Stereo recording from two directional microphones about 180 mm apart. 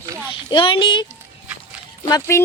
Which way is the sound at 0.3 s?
30° left (ahead or behind).